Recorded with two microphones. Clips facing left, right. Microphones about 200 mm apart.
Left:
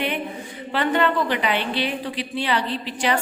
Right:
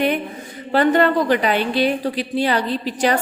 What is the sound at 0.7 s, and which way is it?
A woman's voice, 40° right (ahead or behind).